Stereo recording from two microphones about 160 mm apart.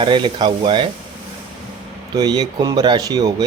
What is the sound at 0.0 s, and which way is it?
Speech, 30° right (ahead or behind).